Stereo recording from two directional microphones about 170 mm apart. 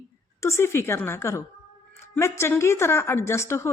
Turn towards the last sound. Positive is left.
turn(degrees=15)  # may be behind; listen again after turning